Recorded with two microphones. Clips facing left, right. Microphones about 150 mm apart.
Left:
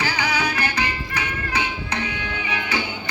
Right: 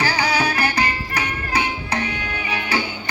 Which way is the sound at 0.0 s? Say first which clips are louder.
Right 3 dB; 35° right (ahead or behind).